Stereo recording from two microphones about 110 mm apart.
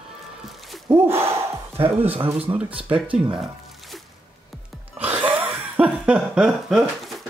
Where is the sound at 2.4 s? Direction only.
10° right (ahead or behind).